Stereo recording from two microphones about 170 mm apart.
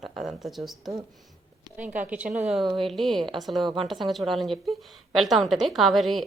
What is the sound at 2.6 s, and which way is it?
Speech, 30° right (ahead or behind).